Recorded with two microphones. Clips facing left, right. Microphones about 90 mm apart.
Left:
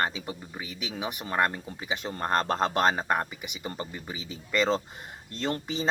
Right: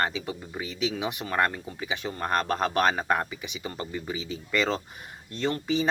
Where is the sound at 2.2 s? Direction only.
30° left (ahead or behind).